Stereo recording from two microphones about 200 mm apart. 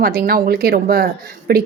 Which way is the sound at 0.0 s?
50° right (ahead or behind).